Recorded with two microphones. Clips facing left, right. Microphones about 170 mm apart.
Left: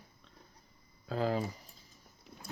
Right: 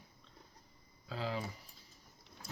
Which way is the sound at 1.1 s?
50° left (ahead or behind).